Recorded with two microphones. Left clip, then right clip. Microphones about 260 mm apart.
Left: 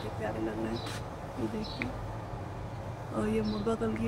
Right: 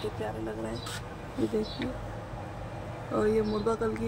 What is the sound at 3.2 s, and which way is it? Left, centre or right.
Speech, centre.